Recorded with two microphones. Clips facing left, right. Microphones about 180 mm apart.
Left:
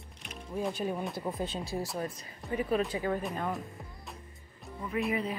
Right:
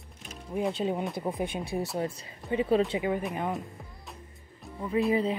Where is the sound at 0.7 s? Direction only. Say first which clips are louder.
Right 4 dB; 25° right (ahead or behind).